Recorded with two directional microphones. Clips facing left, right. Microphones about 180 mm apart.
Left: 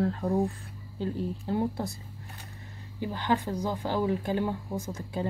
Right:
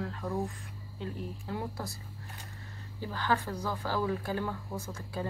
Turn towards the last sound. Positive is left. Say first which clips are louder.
# left 4 dB
turn(degrees=20)  # may be behind; listen again after turning